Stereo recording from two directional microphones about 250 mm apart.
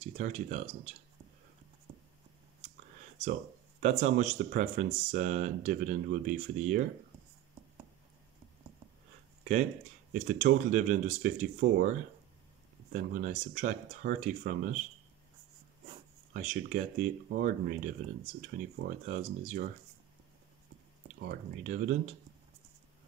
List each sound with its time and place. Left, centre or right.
0.0 s speech: right
3.8 s speech: right
10.1 s speech: right
16.3 s speech: right
21.1 s speech: right